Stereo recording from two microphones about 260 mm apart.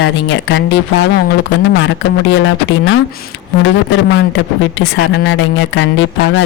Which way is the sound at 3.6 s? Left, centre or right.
Left.